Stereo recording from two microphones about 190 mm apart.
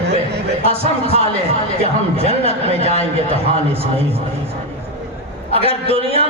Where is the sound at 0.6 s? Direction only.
30° right (ahead or behind).